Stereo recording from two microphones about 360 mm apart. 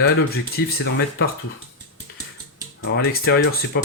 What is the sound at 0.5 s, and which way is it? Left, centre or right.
Speech, left.